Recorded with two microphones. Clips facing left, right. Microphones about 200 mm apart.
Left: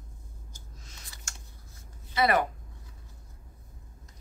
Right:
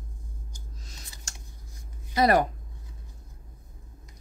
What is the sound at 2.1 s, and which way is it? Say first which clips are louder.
Speech: right 4 dB; 40° right (ahead or behind).